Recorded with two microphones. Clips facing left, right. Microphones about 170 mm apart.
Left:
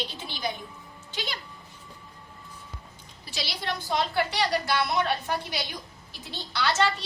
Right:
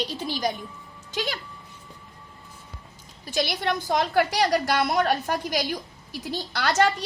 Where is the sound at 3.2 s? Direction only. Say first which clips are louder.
Right 8 dB; 50° right (ahead or behind).